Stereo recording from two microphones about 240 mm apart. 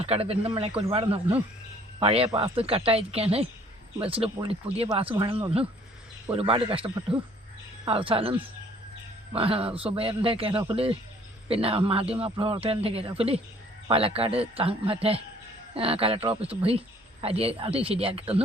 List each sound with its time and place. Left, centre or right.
0.0 s speech: right